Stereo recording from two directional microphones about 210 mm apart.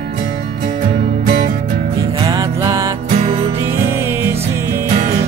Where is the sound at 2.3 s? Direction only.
15° right (ahead or behind).